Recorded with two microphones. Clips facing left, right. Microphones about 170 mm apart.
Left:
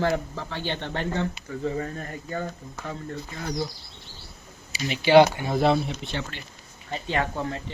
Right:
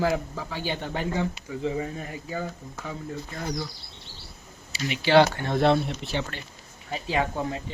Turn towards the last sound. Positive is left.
turn(degrees=-10)  # may be behind; listen again after turning